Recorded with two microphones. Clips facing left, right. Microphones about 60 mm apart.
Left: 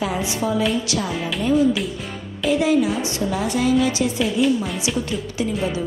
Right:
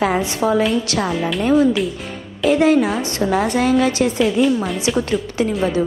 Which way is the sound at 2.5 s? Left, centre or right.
Right.